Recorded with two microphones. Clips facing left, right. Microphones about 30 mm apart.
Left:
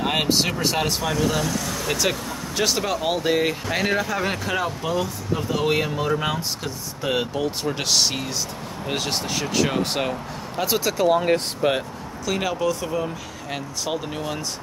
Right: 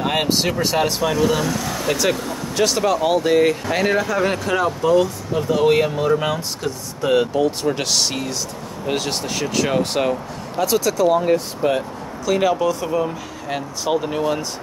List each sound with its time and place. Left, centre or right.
0.0 s speech: centre
2.0 s speech: centre
10.6 s speech: centre
11.1 s speech: left
12.3 s speech: centre